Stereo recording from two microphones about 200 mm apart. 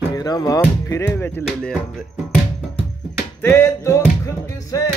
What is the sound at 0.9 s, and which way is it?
Speech, 15° left (ahead or behind).